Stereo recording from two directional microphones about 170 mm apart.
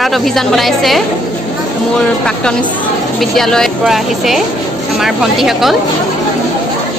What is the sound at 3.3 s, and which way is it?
Speech, 5° left (ahead or behind).